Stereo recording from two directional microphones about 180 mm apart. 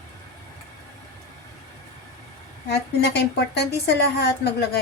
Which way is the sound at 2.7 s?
65° left (ahead or behind).